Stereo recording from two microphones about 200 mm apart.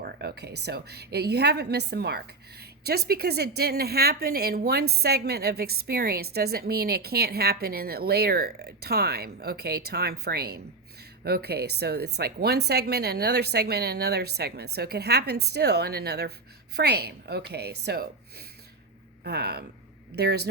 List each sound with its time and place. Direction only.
0.0 s a woman's voice: 55° right (ahead or behind)